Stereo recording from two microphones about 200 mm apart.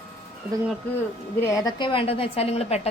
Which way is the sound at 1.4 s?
15° left (ahead or behind).